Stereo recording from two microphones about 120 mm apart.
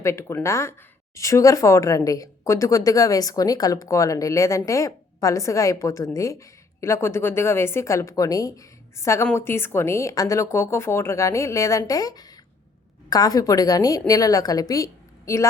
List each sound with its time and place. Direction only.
0.0 s a woman's voice: 25° left (ahead or behind)